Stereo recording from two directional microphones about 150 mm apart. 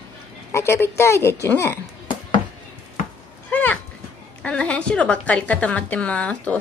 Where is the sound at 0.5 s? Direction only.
15° left (ahead or behind).